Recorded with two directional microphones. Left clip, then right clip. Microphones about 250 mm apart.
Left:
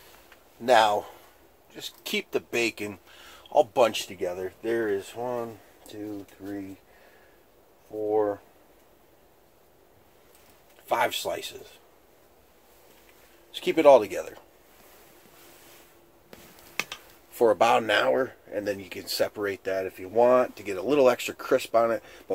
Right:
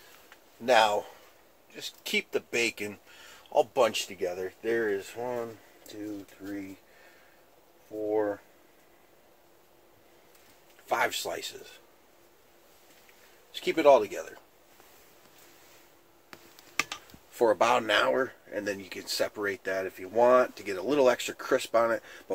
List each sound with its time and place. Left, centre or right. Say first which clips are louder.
0.7 s speech: left 3 dB; centre
8.1 s speech: left 4 dB; centre
10.9 s speech: left 3 dB; centre
13.5 s speech: left 4 dB; left
17.4 s speech: left 3 dB; centre